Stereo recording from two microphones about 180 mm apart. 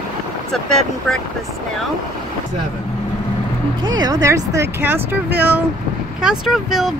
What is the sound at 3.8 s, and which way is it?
Speech, 25° right (ahead or behind).